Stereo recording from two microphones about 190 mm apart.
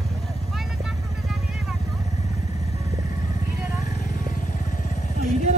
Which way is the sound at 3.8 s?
40° left (ahead or behind).